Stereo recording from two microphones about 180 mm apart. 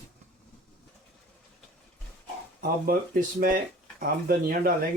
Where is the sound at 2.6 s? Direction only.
55° right (ahead or behind).